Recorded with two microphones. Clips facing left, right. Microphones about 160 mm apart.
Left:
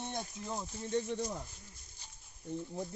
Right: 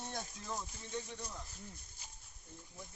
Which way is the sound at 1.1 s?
55° left (ahead or behind).